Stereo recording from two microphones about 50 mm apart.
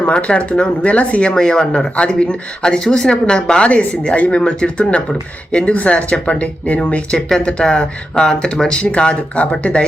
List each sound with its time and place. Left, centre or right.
0.1 s speech: left
1.3 s speech: centre